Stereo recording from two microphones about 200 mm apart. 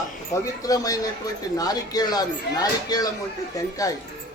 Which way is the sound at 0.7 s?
20° left (ahead or behind).